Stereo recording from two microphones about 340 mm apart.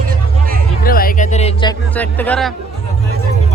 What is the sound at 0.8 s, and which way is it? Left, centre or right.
Speech, left.